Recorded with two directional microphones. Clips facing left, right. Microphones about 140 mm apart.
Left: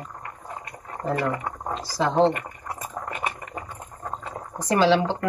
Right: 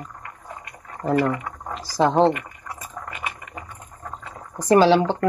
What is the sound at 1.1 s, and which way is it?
Speech, 35° left (ahead or behind).